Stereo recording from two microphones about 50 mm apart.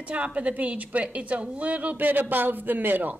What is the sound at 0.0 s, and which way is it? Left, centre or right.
A woman's voice, right.